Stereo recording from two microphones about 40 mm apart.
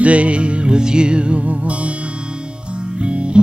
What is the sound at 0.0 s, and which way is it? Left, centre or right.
Music, right.